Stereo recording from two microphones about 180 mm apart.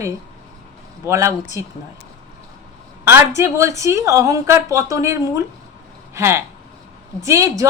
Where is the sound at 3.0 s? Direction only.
15° right (ahead or behind).